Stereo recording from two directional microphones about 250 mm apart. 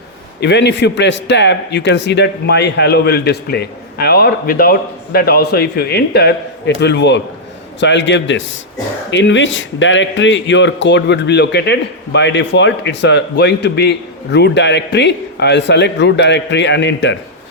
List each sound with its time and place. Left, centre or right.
0.3 s a man's voice: left